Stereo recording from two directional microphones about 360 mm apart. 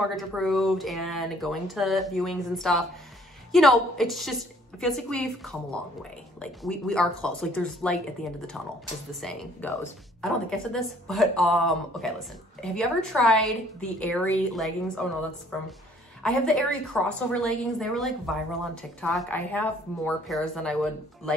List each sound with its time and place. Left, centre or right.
0.1 s a woman's voice: centre
16.2 s a woman's voice: centre